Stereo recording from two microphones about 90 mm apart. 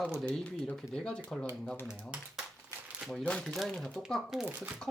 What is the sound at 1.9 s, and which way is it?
Speech, 10° right (ahead or behind).